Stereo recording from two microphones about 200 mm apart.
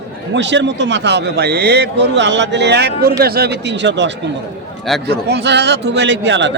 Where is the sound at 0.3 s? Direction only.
65° right (ahead or behind).